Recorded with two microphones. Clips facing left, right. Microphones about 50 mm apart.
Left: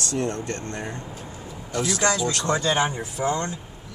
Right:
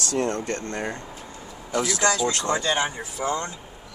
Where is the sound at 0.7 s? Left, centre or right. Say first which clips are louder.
Right 2 dB; right.